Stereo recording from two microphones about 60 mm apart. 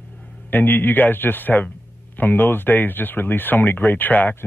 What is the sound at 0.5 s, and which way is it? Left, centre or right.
Speech, left.